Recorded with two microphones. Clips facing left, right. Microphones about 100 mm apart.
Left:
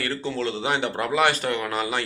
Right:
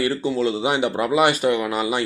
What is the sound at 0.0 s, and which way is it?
Speech, 10° right (ahead or behind).